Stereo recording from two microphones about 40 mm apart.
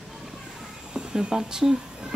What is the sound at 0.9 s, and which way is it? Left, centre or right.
Speech, centre.